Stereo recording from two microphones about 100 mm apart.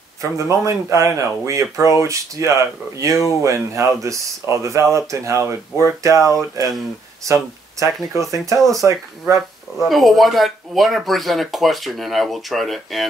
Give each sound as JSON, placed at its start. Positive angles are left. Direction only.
{"t": 0.2, "sound": "speech", "side_deg": -30}
{"t": 9.4, "sound": "speech", "side_deg": 0}